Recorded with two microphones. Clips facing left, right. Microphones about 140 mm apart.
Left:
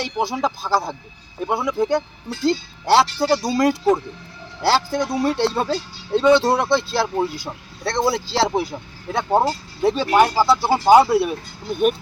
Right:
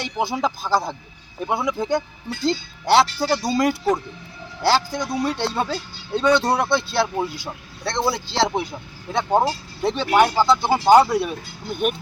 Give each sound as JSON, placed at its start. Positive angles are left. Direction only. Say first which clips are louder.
{"t": 0.0, "sound": "speech", "louder": "left 1 dB", "side_deg": 0}
{"t": 6.1, "sound": "speech", "louder": "left 4 dB", "side_deg": 25}
{"t": 6.4, "sound": "speech", "louder": "left 2 dB", "side_deg": 0}